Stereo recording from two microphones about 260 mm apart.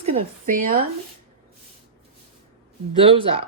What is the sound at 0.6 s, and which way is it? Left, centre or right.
Speech, right.